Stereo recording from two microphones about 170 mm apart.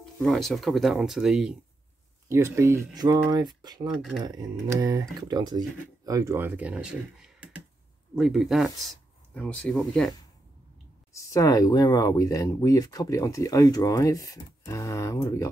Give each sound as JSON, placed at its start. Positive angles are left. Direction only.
{"t": 0.2, "sound": "speech", "side_deg": 0}
{"t": 2.2, "sound": "speech", "side_deg": -15}
{"t": 11.1, "sound": "speech", "side_deg": 20}